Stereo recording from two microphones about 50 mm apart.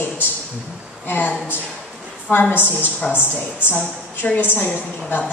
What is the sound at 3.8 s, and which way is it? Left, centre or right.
A woman's voice, left.